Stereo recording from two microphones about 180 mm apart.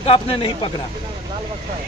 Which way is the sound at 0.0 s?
30° left (ahead or behind).